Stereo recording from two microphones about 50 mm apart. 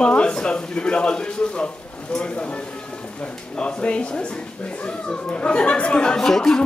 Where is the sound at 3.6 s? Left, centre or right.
Centre.